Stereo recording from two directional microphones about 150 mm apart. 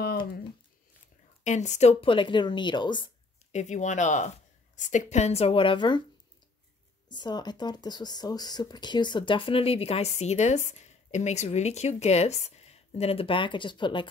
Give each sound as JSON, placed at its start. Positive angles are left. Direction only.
{"t": 1.4, "sound": "speech", "side_deg": 50}
{"t": 3.5, "sound": "speech", "side_deg": 55}
{"t": 7.1, "sound": "speech", "side_deg": 30}